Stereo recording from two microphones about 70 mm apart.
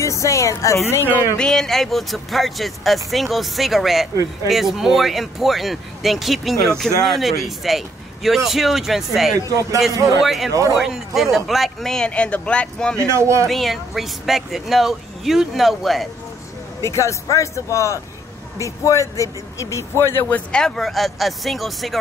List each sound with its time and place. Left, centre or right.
0.0 s a woman's voice: left
1.4 s speech: centre
9.5 s speech: right
10.0 s speech: centre
12.1 s speech: centre
13.0 s speech: right
13.5 s speech: centre
16.8 s speech: left
20.5 s speech: centre